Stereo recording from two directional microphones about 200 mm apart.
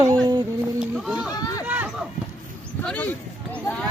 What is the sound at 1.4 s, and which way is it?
Speech, 15° left (ahead or behind).